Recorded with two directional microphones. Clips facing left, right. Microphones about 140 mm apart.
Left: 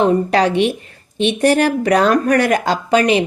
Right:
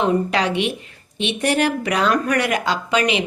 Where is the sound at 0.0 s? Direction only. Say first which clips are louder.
Left 5 dB; 40° left (ahead or behind).